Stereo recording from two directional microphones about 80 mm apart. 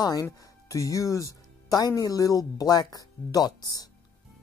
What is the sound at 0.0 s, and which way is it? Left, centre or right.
Speech, left.